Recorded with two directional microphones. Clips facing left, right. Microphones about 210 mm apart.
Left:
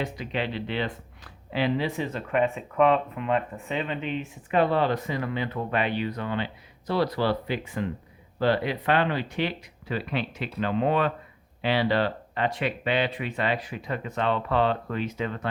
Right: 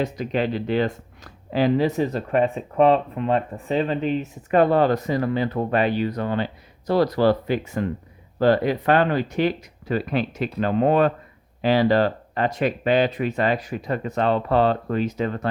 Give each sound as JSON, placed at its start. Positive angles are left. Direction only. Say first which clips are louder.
{"t": 0.0, "sound": "speech", "louder": "right 6 dB", "side_deg": -45}